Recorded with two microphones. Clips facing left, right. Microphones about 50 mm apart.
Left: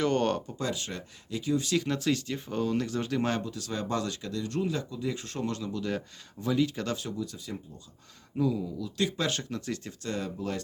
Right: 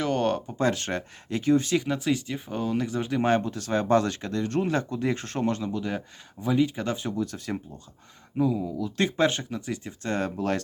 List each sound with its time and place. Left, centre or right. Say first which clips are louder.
0.0 s a sound: right 1 dB; centre
0.6 s speech: right 8 dB; right
1.8 s speech: right 2 dB; centre
3.2 s speech: right 7 dB; right
7.2 s speech: right 6 dB; right
8.4 s speech: right 3 dB; right
8.8 s speech: right 8 dB; right
9.4 s speech: right 2 dB; centre
10.2 s speech: right 7 dB; right